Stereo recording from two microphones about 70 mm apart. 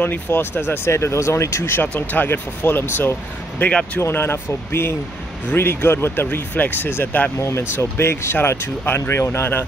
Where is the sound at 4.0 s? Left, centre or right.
Left.